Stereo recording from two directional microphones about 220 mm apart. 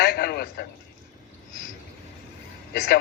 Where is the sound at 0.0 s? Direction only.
45° left (ahead or behind).